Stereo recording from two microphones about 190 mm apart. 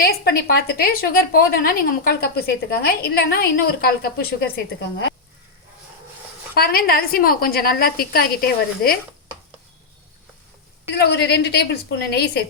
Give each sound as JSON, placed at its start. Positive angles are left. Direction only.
{"t": 0.0, "sound": "a woman's voice", "side_deg": 55}
{"t": 6.5, "sound": "a woman's voice", "side_deg": 50}
{"t": 11.0, "sound": "a woman's voice", "side_deg": 60}